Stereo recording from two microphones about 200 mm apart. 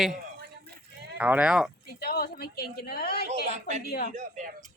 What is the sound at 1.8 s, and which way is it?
Speech, 50° left (ahead or behind).